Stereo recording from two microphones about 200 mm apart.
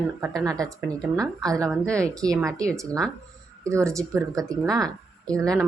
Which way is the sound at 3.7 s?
15° right (ahead or behind).